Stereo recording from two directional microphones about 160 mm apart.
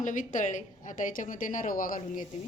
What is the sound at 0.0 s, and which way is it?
Speech, 50° left (ahead or behind).